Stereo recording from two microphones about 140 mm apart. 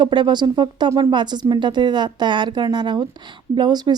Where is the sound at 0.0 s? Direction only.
35° right (ahead or behind).